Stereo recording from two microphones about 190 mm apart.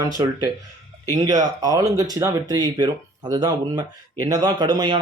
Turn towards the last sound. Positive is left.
turn(degrees=-20)  # may be behind; listen again after turning